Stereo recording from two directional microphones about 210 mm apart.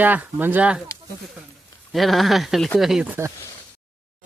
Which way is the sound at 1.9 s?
Centre (ahead or behind).